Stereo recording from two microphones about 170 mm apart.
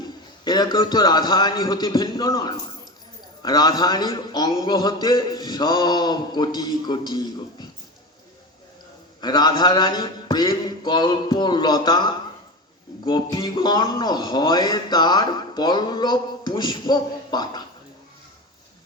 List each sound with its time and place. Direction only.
0.4 s speech: 25° left (ahead or behind)
9.2 s speech: 25° left (ahead or behind)